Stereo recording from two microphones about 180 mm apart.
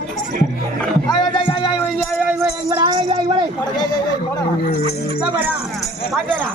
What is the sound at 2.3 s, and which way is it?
Music, 10° right (ahead or behind).